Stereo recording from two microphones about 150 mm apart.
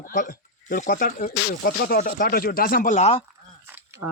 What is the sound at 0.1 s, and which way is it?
Speech, 65° left (ahead or behind).